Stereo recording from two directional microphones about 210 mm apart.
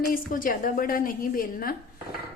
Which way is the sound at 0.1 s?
40° left (ahead or behind).